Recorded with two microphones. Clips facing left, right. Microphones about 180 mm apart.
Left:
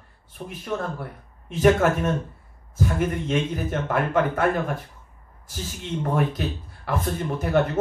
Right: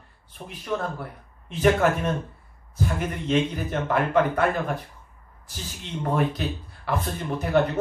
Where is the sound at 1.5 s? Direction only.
50° left (ahead or behind).